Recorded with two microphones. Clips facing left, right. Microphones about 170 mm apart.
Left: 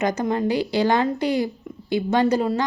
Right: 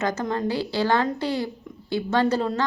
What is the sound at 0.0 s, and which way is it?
Speech, 15° left (ahead or behind).